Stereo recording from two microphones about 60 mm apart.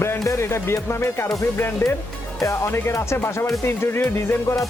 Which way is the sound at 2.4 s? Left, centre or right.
Left.